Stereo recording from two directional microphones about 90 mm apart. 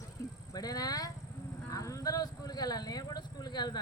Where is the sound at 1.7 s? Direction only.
35° left (ahead or behind).